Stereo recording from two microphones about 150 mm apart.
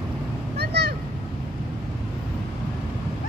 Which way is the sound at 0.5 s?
90° right.